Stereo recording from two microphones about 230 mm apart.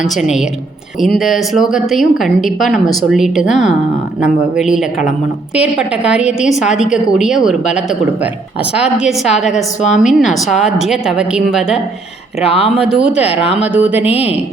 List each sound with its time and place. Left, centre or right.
0.1 s a woman's voice: centre
8.8 s a woman's voice: centre
9.9 s a woman's voice: left
10.2 s a woman's voice: centre
12.4 s speech: left
12.7 s a woman's voice: centre
13.2 s speech: left
13.6 s a woman's voice: centre